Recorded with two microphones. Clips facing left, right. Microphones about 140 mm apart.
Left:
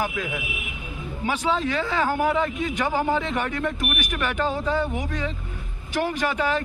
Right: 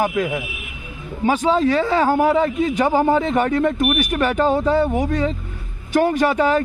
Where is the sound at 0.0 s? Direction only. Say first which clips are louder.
Right 7 dB; 45° right (ahead or behind).